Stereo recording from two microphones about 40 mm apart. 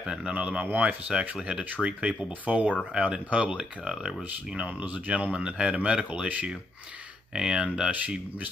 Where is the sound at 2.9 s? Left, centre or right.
Right.